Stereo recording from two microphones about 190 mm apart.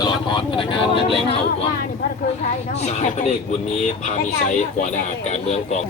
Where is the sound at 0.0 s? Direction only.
25° left (ahead or behind).